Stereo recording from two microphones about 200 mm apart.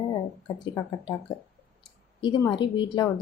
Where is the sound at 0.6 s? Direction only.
20° left (ahead or behind).